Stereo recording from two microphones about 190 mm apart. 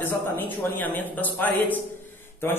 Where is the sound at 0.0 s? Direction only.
10° left (ahead or behind).